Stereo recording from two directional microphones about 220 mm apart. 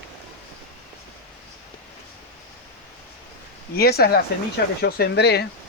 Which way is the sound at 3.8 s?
45° left (ahead or behind).